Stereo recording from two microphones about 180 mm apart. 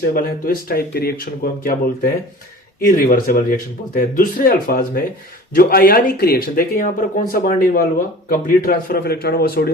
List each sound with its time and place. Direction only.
0.0 s speech: 55° left (ahead or behind)